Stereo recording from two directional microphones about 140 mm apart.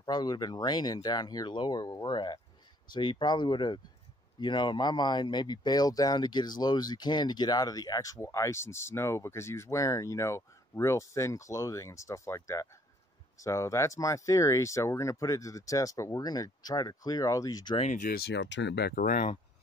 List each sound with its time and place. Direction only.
0.0 s speech: 30° left (ahead or behind)
17.7 s speech: 60° left (ahead or behind); by 19.3 s 80° left